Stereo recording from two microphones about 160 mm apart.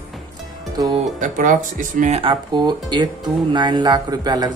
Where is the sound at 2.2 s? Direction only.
30° right (ahead or behind).